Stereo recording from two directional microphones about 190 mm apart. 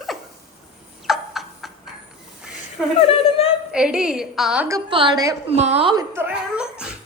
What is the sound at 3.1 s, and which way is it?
Speech, 30° left (ahead or behind).